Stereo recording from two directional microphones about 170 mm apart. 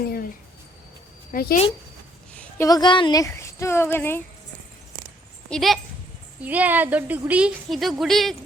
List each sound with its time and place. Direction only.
1.3 s a woman's voice: 60° left (ahead or behind)
2.3 s a sound: 10° left (ahead or behind)
2.6 s speech: 25° left (ahead or behind)
5.5 s speech: centre (ahead or behind)
6.4 s speech: 10° right (ahead or behind)